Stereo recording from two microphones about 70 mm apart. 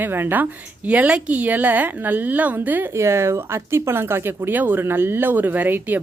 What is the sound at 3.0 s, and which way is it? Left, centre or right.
Speech, right.